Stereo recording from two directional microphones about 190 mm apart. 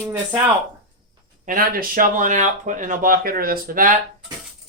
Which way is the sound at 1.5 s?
50° right (ahead or behind).